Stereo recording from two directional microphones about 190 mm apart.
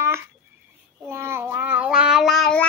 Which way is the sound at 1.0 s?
15° right (ahead or behind).